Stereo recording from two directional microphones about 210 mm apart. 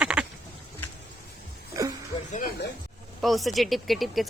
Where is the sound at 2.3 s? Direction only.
40° left (ahead or behind).